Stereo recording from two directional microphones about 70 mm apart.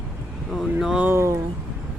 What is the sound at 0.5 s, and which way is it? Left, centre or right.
Music, centre.